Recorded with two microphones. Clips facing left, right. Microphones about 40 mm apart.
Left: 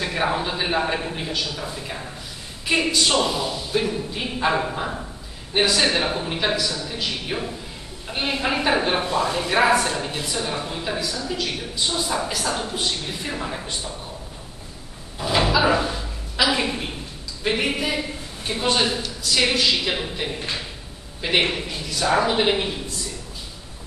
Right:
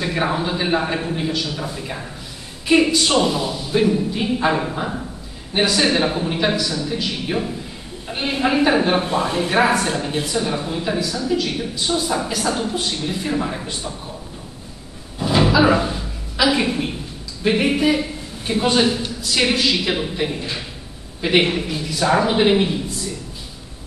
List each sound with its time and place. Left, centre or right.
0.0 s a man's voice: centre
9.0 s speech: centre
9.6 s a man's voice: centre
15.1 s a sound: centre
17.5 s a man's voice: centre